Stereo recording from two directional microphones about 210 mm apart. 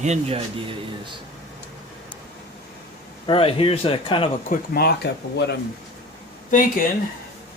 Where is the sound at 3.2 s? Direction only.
25° left (ahead or behind).